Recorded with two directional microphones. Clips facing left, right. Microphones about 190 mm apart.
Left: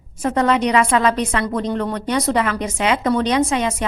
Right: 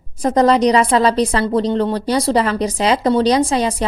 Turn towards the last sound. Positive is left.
turn(degrees=-35)  # may be behind; listen again after turning